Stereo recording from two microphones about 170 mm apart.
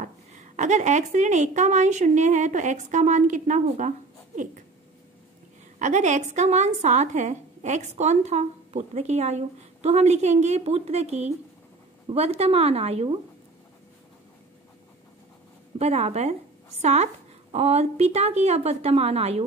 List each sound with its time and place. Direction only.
0.6 s a woman's voice: 45° right (ahead or behind)
5.8 s a woman's voice: 45° right (ahead or behind)
15.8 s a woman's voice: 40° right (ahead or behind)